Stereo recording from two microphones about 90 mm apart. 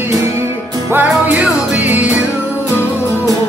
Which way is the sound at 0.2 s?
30° right (ahead or behind).